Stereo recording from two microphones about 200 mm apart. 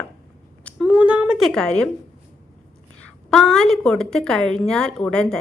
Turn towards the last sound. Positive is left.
turn(degrees=5)  # may be behind; listen again after turning